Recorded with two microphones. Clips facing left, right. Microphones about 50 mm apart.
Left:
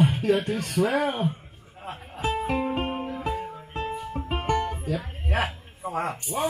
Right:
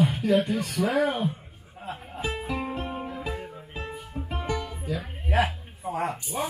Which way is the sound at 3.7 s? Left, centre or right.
Left.